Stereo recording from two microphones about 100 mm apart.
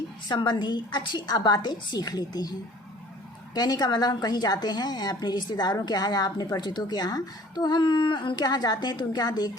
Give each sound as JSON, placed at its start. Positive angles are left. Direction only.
{"t": 0.3, "sound": "a woman's voice", "side_deg": 50}
{"t": 3.5, "sound": "a woman's voice", "side_deg": 40}